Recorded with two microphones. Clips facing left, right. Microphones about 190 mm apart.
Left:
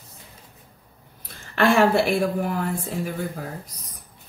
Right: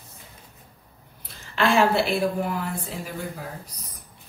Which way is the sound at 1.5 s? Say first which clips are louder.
Left 2 dB; 55° left (ahead or behind).